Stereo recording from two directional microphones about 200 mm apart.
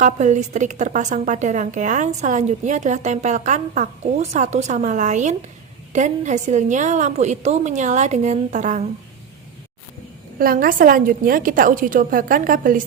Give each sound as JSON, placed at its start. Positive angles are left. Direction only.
{"t": 0.0, "sound": "a woman's voice", "side_deg": -35}
{"t": 10.3, "sound": "a woman's voice", "side_deg": -45}